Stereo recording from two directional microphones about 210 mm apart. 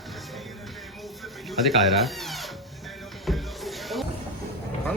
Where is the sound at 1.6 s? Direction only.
Centre (ahead or behind).